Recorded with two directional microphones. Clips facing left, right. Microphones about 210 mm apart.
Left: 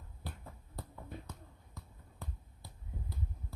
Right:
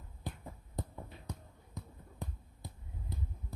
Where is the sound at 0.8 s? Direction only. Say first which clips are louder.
Right 2 dB; 20° right (ahead or behind).